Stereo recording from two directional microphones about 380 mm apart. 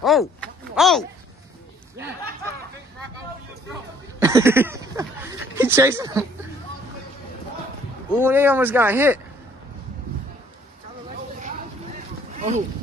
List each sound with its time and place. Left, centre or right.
0.0 s speech: centre
4.2 s a sound: centre
5.6 s speech: centre
8.1 s speech: centre
12.4 s speech: centre